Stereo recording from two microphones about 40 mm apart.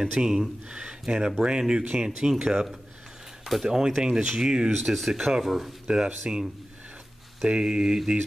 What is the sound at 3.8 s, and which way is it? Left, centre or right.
Speech, centre.